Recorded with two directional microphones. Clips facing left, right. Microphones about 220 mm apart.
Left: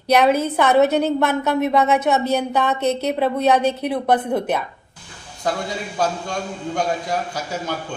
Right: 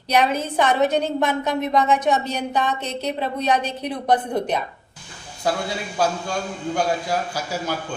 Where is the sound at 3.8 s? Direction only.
55° left (ahead or behind).